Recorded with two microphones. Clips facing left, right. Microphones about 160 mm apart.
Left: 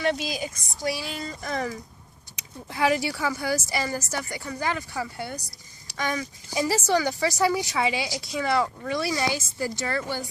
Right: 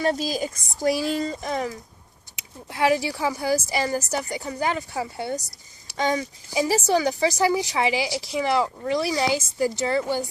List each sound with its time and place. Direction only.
0.0 s speech: 40° right (ahead or behind)
1.4 s speech: 20° right (ahead or behind)
2.6 s a woman's voice: 15° right (ahead or behind)